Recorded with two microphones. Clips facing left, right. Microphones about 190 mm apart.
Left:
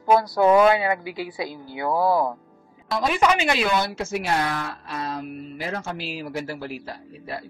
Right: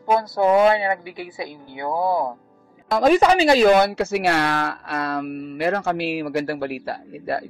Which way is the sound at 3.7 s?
65° right (ahead or behind).